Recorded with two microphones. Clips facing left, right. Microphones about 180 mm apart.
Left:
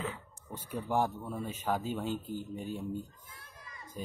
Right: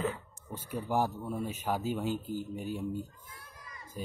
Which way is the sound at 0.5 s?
10° right (ahead or behind).